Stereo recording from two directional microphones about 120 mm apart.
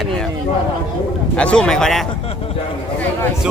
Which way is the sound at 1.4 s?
10° left (ahead or behind).